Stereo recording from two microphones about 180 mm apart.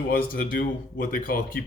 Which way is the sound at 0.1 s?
55° left (ahead or behind).